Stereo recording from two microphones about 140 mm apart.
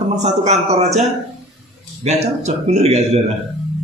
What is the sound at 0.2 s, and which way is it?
Speech, 55° right (ahead or behind).